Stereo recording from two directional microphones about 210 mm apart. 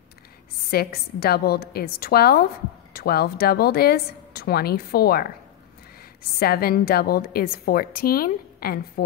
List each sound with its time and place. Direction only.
0.7 s a woman's voice: 45° left (ahead or behind)
6.4 s a woman's voice: 45° left (ahead or behind)